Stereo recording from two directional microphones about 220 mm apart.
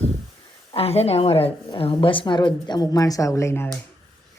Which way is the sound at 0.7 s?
25° left (ahead or behind).